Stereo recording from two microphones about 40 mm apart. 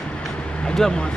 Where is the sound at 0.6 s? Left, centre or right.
Centre.